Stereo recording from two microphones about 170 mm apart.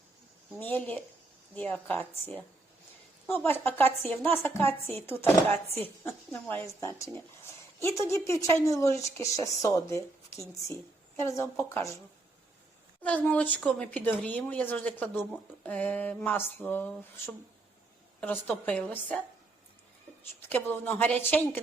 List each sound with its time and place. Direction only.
0.6 s speech: 10° left (ahead or behind)
13.0 s speech: 10° left (ahead or behind)
20.4 s speech: 10° left (ahead or behind)